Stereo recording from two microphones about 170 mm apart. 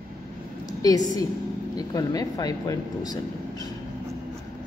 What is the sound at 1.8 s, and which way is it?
A woman's voice, 20° left (ahead or behind).